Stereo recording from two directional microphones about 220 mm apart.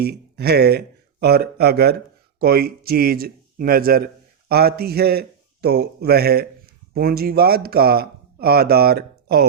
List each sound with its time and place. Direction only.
0.0 s speech: 45° right (ahead or behind)